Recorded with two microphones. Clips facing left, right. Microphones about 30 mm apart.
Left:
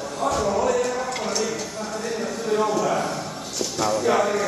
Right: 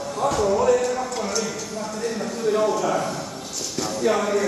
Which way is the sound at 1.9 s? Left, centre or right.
Centre.